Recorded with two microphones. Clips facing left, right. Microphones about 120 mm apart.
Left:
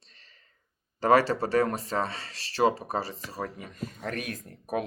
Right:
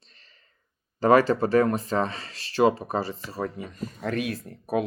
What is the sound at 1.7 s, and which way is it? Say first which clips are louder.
Speech: right 4 dB; 35° left (ahead or behind).